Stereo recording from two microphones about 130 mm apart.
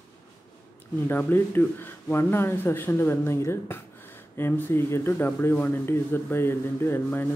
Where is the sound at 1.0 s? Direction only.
15° left (ahead or behind).